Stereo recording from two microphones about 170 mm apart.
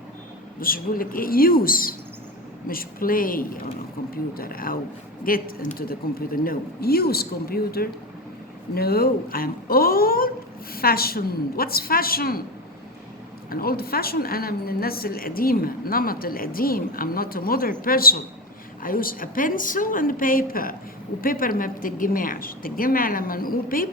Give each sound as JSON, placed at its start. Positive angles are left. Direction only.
{"t": 0.6, "sound": "a woman's voice", "side_deg": 55}
{"t": 13.5, "sound": "a woman's voice", "side_deg": 60}